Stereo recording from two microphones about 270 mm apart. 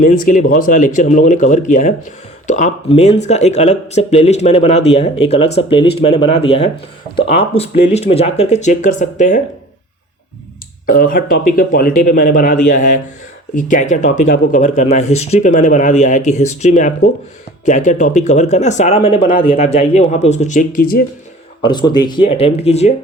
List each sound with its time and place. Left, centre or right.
0.0 s speech: left
10.8 s speech: left
21.6 s speech: centre